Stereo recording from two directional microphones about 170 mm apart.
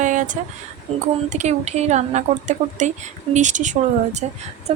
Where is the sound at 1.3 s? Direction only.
45° right (ahead or behind).